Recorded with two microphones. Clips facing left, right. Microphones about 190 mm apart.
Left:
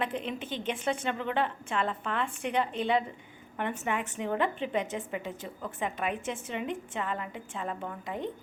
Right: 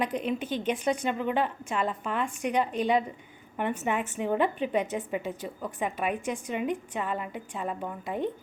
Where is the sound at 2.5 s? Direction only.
15° right (ahead or behind).